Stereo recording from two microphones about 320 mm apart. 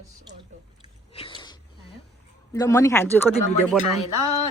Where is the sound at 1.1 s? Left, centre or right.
Centre.